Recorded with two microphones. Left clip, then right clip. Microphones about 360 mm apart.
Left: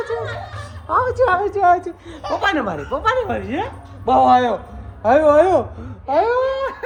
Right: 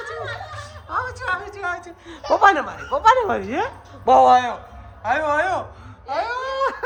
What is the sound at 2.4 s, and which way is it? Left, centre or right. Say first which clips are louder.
Speech: right 4 dB; centre.